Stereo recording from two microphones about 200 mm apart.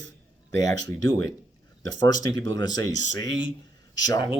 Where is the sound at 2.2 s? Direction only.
20° left (ahead or behind).